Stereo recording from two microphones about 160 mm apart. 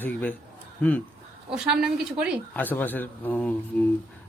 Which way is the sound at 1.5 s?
5° right (ahead or behind).